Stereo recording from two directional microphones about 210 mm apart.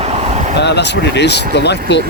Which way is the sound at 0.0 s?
30° right (ahead or behind).